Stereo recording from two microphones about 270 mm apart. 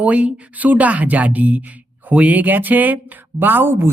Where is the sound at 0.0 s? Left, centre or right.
Centre.